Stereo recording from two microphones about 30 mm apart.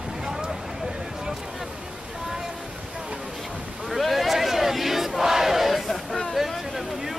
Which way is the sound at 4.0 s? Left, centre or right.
Centre.